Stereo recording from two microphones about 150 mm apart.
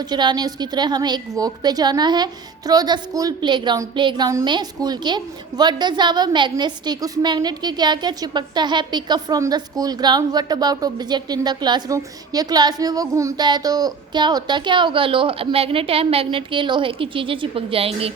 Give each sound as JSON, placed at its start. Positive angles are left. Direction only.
{"t": 0.0, "sound": "a woman's voice", "side_deg": -30}